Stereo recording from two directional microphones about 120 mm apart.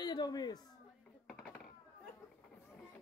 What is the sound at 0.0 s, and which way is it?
Speech, 35° left (ahead or behind).